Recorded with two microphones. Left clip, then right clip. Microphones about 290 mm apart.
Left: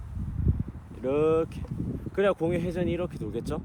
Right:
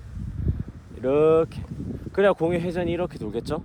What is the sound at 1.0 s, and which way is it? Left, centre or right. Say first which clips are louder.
Speech: right 6 dB; right.